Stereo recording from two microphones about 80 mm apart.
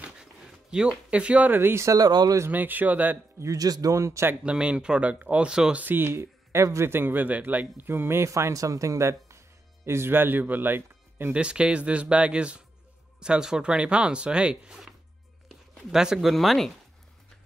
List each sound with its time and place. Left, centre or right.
0.0 s a sound: centre; by 1.9 s right
1.9 s speech: right
2.5 s speech: right
3.3 s speech: right
4.5 s speech: centre
5.9 s speech: right
11.3 s speech: centre